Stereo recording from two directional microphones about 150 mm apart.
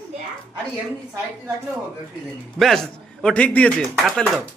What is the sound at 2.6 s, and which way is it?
A man's voice, centre (ahead or behind).